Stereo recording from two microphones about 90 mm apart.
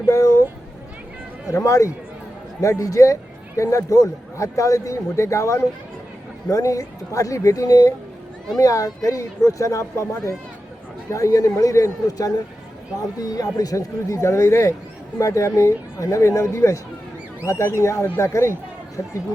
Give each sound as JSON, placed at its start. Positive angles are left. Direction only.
{"t": 0.0, "sound": "a man's voice", "side_deg": 40}
{"t": 1.5, "sound": "a man's voice", "side_deg": 35}